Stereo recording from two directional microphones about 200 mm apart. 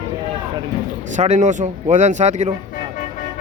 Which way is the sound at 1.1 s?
35° right (ahead or behind).